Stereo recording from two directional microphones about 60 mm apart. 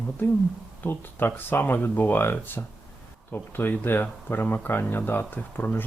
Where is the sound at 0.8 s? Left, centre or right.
Left.